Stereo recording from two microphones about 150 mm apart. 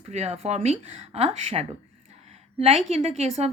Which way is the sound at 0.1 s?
45° right (ahead or behind).